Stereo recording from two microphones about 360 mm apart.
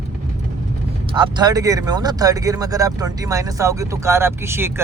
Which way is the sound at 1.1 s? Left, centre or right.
Centre.